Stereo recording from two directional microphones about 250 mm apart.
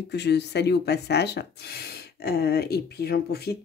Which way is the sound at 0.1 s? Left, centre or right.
Left.